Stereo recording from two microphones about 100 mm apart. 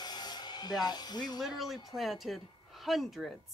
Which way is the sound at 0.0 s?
45° left (ahead or behind).